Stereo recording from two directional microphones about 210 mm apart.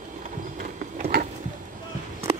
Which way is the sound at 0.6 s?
40° right (ahead or behind).